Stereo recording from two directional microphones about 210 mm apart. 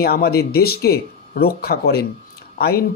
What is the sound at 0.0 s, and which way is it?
Speech, 45° left (ahead or behind).